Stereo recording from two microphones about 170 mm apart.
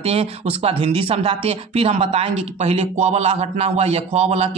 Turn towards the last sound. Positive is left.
turn(degrees=-40)  # may be behind; listen again after turning